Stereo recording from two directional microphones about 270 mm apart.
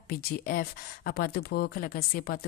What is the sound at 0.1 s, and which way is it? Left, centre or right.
Speech, left.